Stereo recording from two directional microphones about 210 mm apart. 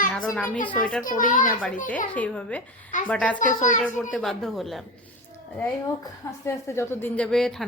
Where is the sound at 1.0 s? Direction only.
40° left (ahead or behind).